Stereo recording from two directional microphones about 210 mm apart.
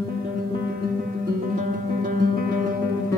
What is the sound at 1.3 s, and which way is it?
Music, 40° right (ahead or behind).